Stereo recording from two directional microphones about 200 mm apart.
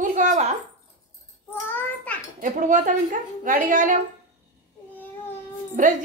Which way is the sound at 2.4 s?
40° right (ahead or behind).